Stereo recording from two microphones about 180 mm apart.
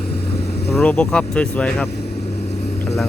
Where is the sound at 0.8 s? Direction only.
5° left (ahead or behind).